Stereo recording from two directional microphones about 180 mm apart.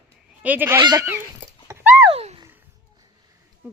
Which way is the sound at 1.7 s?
10° right (ahead or behind).